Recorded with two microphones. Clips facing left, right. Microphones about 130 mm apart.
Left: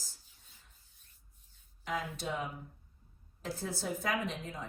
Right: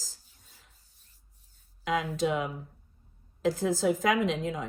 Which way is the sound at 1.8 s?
90° right.